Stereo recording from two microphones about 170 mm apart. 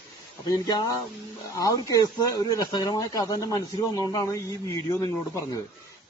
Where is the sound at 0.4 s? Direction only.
25° left (ahead or behind).